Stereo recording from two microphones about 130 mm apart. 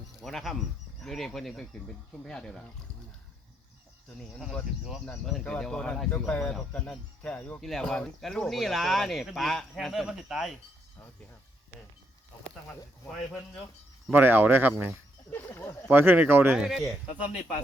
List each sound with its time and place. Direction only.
0.2 s speech: centre (ahead or behind)
4.9 s speech: 5° left (ahead or behind)
14.1 s speech: 15° right (ahead or behind)
15.3 s speech: 15° left (ahead or behind)
15.9 s speech: 15° right (ahead or behind)
16.6 s speech: centre (ahead or behind)